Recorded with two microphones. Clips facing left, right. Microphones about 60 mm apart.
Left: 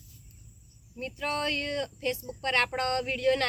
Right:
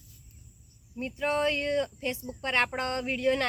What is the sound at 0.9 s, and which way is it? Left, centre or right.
A woman's voice, centre.